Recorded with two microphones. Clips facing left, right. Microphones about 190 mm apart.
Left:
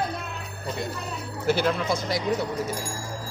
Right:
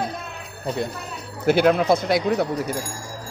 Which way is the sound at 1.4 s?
60° right (ahead or behind).